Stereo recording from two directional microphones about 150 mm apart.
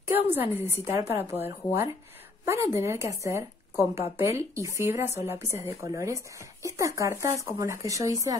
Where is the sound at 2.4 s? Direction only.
20° right (ahead or behind).